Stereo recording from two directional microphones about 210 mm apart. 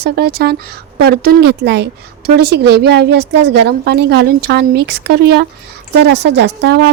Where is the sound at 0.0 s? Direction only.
50° right (ahead or behind).